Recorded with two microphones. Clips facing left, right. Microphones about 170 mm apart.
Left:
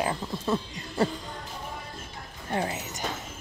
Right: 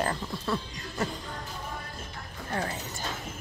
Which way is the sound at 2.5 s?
20° left (ahead or behind).